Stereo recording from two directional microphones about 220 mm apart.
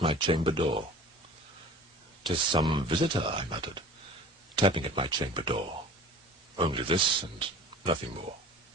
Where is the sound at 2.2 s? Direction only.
20° right (ahead or behind).